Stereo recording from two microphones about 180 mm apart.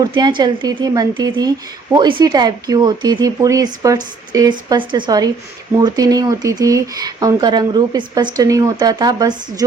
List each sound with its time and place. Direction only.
0.0 s speech: 25° right (ahead or behind)